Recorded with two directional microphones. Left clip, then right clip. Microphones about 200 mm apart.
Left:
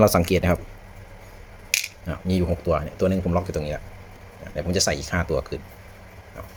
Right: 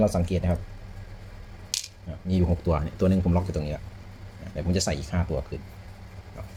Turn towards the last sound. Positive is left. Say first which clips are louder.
# left 7 dB
turn(degrees=20)  # may be behind; listen again after turning